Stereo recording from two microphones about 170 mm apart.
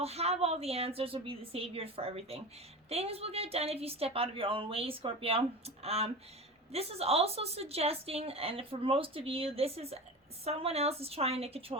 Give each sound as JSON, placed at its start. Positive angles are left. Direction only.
{"t": 0.0, "sound": "a woman's voice", "side_deg": -35}